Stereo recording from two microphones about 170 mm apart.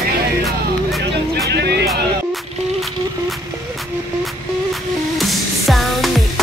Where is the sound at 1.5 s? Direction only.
70° right (ahead or behind).